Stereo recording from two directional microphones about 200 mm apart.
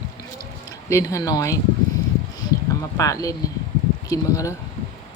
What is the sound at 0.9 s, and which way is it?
Speech, 15° left (ahead or behind).